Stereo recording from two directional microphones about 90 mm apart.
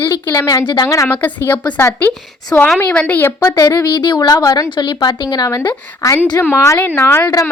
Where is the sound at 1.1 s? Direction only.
25° left (ahead or behind).